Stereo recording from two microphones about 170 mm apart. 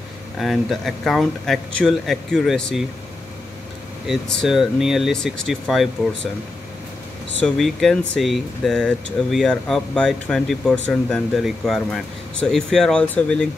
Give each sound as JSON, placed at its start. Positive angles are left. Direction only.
{"t": 0.4, "sound": "speech", "side_deg": 0}
{"t": 4.1, "sound": "speech", "side_deg": 0}
{"t": 7.4, "sound": "speech", "side_deg": 0}